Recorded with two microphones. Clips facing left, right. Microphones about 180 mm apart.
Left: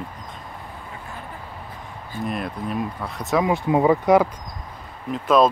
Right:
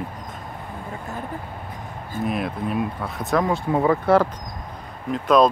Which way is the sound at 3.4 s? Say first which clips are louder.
Left 4 dB; 15° left (ahead or behind).